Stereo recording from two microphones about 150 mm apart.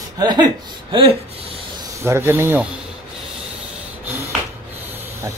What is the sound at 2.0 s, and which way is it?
Speech, 15° right (ahead or behind).